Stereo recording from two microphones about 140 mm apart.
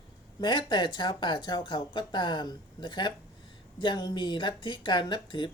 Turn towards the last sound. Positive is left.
turn(degrees=35)  # may be behind; listen again after turning